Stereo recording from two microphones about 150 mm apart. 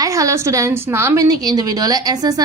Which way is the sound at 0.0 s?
20° right (ahead or behind).